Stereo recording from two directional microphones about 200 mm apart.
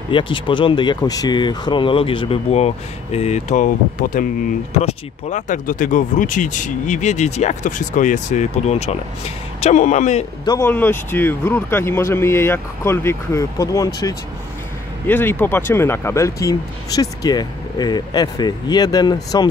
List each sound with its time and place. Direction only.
0.1 s speech: 25° left (ahead or behind)
10.6 s speech: 10° left (ahead or behind)